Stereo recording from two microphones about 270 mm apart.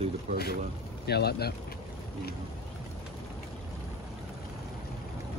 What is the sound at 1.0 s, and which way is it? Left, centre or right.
Speech, left.